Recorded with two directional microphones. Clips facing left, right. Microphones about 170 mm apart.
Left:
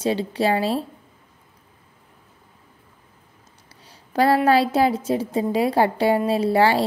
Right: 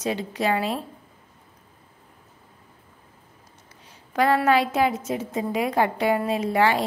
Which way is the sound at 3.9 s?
35° left (ahead or behind).